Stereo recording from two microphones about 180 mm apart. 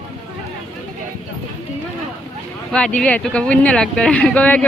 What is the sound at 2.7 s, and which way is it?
Speech, 5° left (ahead or behind).